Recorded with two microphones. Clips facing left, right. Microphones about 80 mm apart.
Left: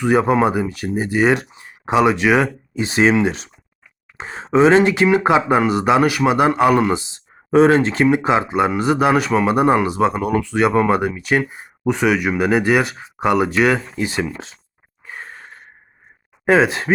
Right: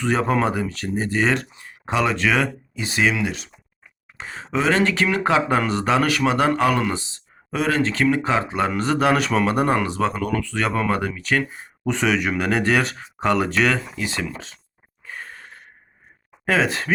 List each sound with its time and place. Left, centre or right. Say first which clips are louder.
0.0 s speech: left 5 dB; centre
15.0 s a sound: left 2 dB; left
16.5 s speech: left 6 dB; centre